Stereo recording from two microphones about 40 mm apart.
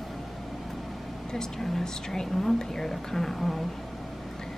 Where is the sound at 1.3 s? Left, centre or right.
Centre.